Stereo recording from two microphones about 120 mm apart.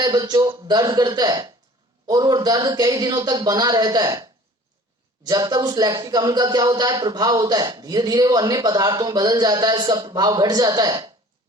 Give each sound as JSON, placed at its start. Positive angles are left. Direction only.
{"t": 0.0, "sound": "speech", "side_deg": -35}